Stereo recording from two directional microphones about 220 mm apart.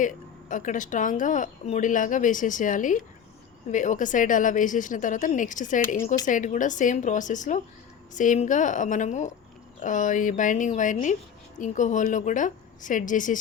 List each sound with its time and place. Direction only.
0.0 s speech: 35° left (ahead or behind)